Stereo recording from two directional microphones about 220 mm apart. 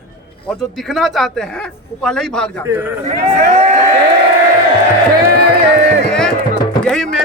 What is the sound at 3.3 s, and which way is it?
Speech, 30° right (ahead or behind).